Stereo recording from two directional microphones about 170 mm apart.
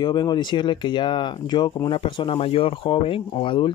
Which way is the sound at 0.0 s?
25° left (ahead or behind).